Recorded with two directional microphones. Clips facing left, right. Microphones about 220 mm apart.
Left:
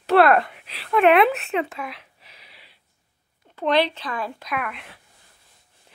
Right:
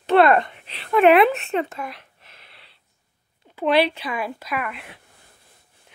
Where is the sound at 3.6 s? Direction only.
10° right (ahead or behind).